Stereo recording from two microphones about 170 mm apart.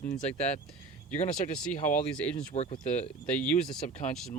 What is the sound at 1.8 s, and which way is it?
Speech, 50° left (ahead or behind).